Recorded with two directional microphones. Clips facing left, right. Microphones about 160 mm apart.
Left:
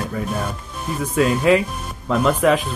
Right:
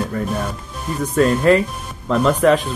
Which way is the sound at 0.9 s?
5° left (ahead or behind).